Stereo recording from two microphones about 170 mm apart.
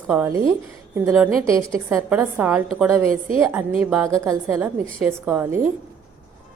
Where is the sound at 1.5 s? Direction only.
15° right (ahead or behind).